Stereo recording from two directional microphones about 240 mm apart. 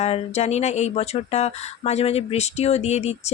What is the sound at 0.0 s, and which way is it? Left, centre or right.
Speech, left.